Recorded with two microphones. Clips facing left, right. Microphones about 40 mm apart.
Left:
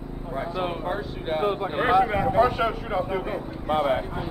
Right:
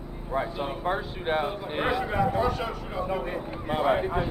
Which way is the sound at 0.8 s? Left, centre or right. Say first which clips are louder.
Right 1 dB; centre.